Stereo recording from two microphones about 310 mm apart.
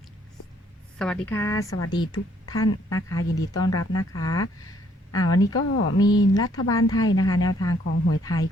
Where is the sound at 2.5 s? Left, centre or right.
Left.